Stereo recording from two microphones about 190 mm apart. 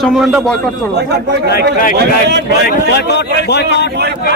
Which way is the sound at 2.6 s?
60° left (ahead or behind).